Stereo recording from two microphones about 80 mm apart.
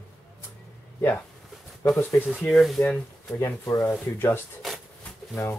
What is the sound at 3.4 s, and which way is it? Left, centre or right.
Speech, left.